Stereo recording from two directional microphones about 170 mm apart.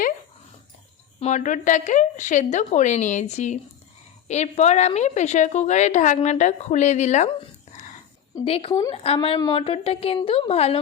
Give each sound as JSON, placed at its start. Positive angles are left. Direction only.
{"t": 1.2, "sound": "a woman's voice", "side_deg": 45}
{"t": 8.4, "sound": "a woman's voice", "side_deg": 35}